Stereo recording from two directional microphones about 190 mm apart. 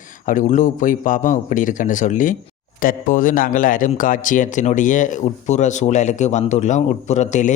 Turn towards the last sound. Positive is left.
turn(degrees=40)  # may be behind; listen again after turning